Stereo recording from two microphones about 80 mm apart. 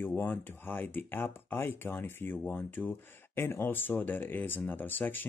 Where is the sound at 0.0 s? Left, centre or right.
Left.